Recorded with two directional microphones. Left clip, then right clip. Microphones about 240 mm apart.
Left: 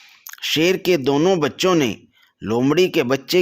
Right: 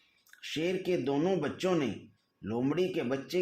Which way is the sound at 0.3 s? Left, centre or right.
Left.